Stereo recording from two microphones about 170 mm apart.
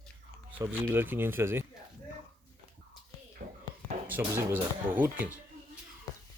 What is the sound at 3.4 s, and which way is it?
Whispering, 45° right (ahead or behind).